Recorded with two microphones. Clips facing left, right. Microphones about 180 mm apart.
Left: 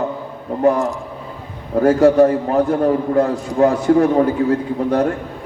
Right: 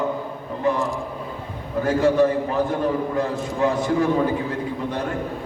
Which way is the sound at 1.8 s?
65° left (ahead or behind).